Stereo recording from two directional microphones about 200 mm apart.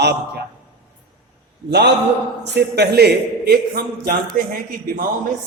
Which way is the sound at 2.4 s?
55° right (ahead or behind).